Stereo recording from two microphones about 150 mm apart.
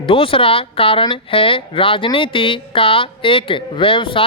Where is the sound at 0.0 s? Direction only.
35° left (ahead or behind).